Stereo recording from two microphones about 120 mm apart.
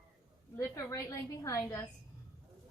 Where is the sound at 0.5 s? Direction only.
25° left (ahead or behind).